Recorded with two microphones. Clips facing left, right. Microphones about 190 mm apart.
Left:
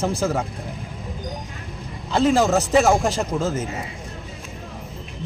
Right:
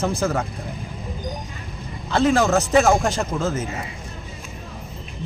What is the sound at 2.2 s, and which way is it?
A man's voice, centre (ahead or behind).